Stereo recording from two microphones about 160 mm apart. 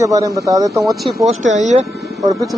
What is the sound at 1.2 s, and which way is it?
Speech, 50° right (ahead or behind).